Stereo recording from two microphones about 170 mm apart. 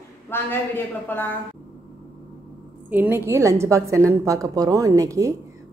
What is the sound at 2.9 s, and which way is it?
A woman's voice, 15° right (ahead or behind).